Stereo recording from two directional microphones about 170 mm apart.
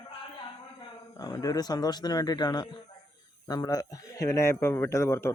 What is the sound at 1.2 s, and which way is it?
Speech, 20° left (ahead or behind).